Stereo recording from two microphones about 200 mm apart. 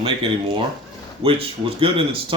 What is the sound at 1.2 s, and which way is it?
Speech, 30° right (ahead or behind).